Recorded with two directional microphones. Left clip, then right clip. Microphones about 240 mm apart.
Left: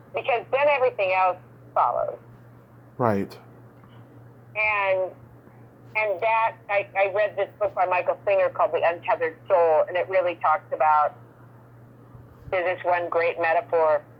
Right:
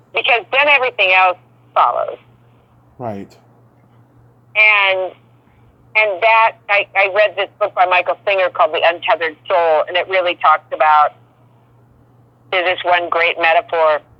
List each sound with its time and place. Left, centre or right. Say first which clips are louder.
0.1 s speech: right 9 dB; right
3.0 s speech: left 3 dB; centre
4.5 s speech: right 11 dB; right
12.5 s speech: right 9 dB; right